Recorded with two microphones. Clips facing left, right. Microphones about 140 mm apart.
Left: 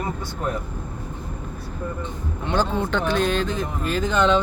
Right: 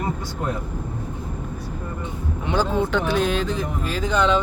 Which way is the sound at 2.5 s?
10° right (ahead or behind).